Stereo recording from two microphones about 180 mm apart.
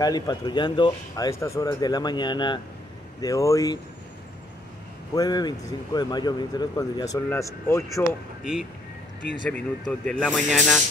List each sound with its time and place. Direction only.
0.0 s speech: 20° left (ahead or behind)
5.1 s speech: 20° left (ahead or behind)
9.5 s speech: 5° left (ahead or behind)